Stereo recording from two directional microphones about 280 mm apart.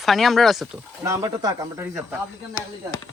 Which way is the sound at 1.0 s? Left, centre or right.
Centre.